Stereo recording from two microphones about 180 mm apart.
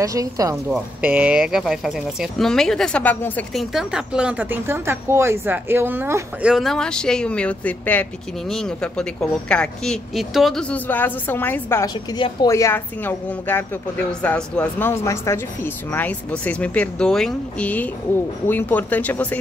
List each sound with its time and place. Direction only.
0.0 s a woman's voice: 20° right (ahead or behind)
0.7 s speech: 5° right (ahead or behind)
3.7 s speech: 5° right (ahead or behind)
6.5 s speech: centre (ahead or behind)